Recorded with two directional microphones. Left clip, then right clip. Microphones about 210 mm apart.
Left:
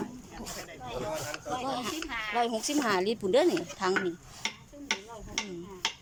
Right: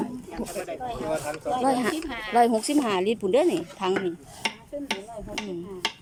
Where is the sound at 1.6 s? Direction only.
35° right (ahead or behind).